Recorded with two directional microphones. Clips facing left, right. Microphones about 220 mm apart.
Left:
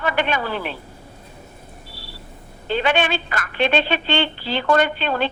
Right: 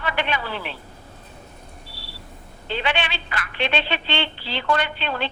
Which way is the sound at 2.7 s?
45° left (ahead or behind).